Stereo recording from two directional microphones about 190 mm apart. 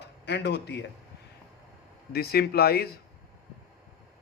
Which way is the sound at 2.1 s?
55° left (ahead or behind).